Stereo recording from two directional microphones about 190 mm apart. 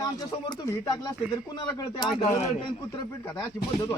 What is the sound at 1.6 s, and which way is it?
Speech, 15° left (ahead or behind).